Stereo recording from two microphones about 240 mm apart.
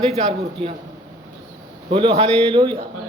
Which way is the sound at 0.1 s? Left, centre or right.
Right.